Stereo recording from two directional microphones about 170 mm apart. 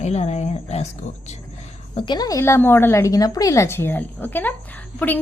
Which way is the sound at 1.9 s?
25° left (ahead or behind).